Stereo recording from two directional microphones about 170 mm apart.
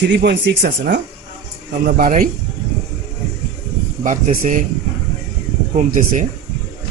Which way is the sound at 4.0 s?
50° right (ahead or behind).